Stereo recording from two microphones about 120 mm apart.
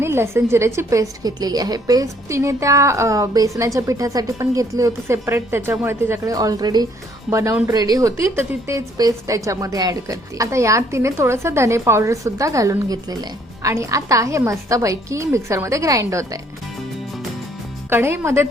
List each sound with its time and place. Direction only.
0.0 s a woman's voice: 20° right (ahead or behind)
6.3 s a woman's voice: 30° right (ahead or behind)
7.3 s a woman's voice: 25° right (ahead or behind)
17.8 s a woman's voice: 20° right (ahead or behind)